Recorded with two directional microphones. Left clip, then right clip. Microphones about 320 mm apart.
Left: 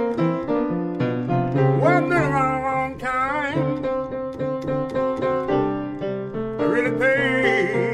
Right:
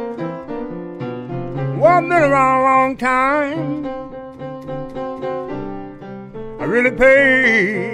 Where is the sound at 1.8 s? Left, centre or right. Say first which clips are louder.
Right 9 dB; centre.